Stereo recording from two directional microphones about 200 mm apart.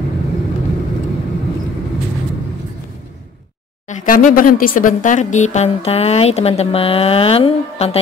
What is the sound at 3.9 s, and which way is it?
Speech, 40° left (ahead or behind).